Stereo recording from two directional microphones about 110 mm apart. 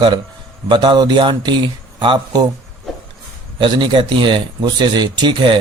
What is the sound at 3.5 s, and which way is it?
Speech, 45° right (ahead or behind).